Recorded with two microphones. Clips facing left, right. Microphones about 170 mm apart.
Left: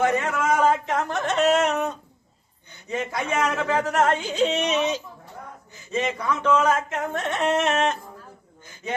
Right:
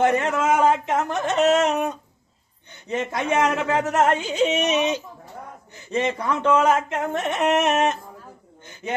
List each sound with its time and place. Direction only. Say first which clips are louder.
0.2 s speech: right 2 dB; 25° right (ahead or behind)
2.9 s speech: right 3 dB; 25° right (ahead or behind)
6.1 s speech: right 1 dB; 30° right (ahead or behind); by 7.9 s 15° right (ahead or behind)